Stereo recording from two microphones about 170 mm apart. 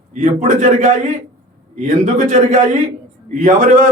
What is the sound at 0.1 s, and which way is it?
A man's voice, 45° right (ahead or behind).